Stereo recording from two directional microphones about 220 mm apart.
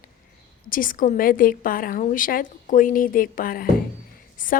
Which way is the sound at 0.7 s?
40° left (ahead or behind).